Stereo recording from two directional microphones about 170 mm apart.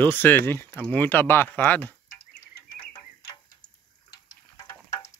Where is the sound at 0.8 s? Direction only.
10° left (ahead or behind).